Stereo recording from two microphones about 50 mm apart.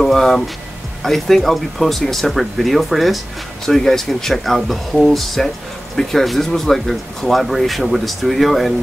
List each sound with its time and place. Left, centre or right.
0.0 s speech: centre